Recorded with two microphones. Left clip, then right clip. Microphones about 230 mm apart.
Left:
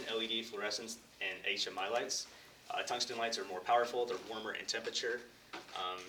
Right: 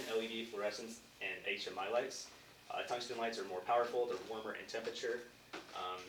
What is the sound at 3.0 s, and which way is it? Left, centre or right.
Speech, left.